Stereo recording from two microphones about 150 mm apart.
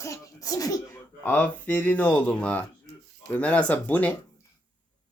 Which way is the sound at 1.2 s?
10° left (ahead or behind).